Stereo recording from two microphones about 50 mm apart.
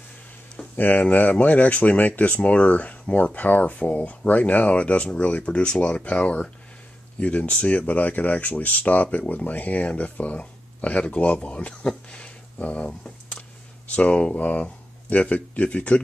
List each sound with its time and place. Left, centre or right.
0.7 s speech: left
12.1 s a sound: left
13.9 s speech: left